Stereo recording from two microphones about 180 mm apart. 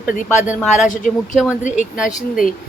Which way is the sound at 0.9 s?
45° left (ahead or behind).